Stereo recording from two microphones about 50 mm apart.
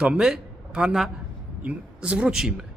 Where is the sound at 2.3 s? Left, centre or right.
Centre.